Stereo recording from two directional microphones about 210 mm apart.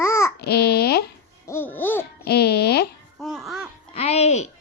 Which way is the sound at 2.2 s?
50° left (ahead or behind).